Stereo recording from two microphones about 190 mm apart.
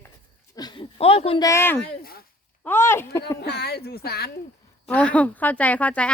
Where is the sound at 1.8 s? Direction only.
55° left (ahead or behind).